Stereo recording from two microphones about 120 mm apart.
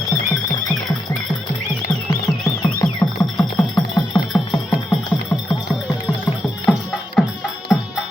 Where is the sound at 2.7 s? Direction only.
30° left (ahead or behind).